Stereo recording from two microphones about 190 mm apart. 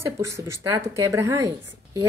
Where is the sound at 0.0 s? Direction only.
15° right (ahead or behind).